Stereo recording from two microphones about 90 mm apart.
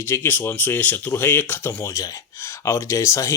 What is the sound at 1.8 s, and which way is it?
Speech, 40° left (ahead or behind).